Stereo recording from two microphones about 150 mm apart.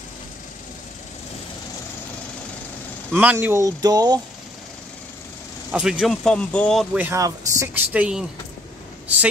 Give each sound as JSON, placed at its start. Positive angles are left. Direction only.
{"t": 3.1, "sound": "speech", "side_deg": -10}
{"t": 5.7, "sound": "speech", "side_deg": -5}
{"t": 7.0, "sound": "speech", "side_deg": -20}